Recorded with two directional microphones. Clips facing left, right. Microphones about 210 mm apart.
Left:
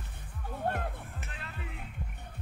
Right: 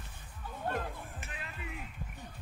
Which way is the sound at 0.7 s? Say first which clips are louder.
Left 2 dB; 60° left (ahead or behind).